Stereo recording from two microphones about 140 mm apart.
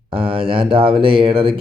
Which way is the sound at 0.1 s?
40° right (ahead or behind).